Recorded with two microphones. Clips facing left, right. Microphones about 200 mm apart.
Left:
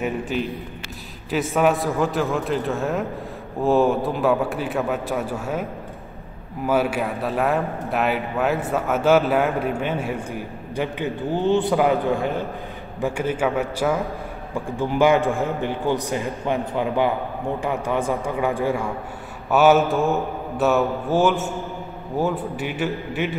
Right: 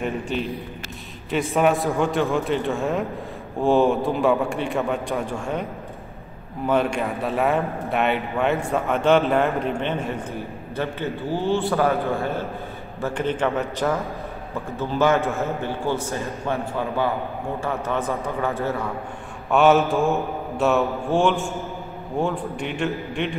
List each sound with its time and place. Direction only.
0.0 s a man's voice: centre (ahead or behind)
19.5 s a man's voice: centre (ahead or behind)